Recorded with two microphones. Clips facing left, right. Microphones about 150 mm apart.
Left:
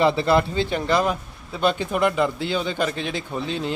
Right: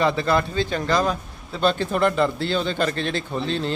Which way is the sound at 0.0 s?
25° left (ahead or behind).